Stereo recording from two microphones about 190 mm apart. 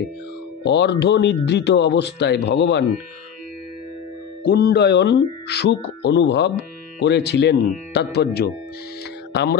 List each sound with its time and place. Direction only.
0.7 s speech: 65° left (ahead or behind)
4.5 s speech: 55° left (ahead or behind)